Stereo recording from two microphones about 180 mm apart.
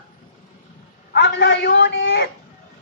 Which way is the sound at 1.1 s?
75° left (ahead or behind).